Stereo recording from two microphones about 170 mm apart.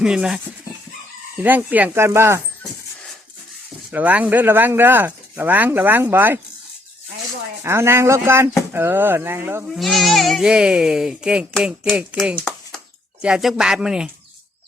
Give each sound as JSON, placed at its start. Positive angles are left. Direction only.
{"t": 0.0, "sound": "speech", "side_deg": -5}
{"t": 3.9, "sound": "speech", "side_deg": -10}
{"t": 7.6, "sound": "speech", "side_deg": -15}
{"t": 9.7, "sound": "speech", "side_deg": 0}